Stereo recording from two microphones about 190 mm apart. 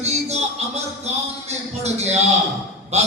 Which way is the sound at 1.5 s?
35° right (ahead or behind).